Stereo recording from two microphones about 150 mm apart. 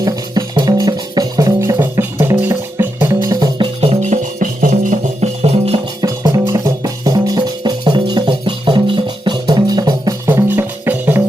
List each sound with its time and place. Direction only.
0.0 s music: 25° right (ahead or behind)
3.8 s music: 45° right (ahead or behind)
6.0 s music: 20° right (ahead or behind)
10.2 s music: 15° right (ahead or behind)